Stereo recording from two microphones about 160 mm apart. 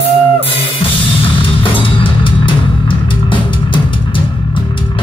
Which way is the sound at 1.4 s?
35° left (ahead or behind).